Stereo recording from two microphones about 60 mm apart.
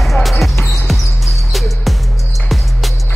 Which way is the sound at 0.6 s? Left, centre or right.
Left.